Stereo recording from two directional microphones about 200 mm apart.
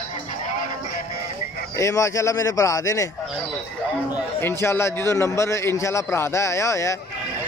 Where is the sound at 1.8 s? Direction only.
15° left (ahead or behind).